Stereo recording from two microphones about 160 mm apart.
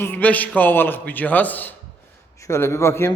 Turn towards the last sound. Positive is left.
turn(degrees=15)  # may be behind; listen again after turning